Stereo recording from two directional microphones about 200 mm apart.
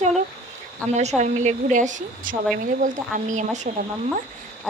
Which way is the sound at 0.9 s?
35° right (ahead or behind).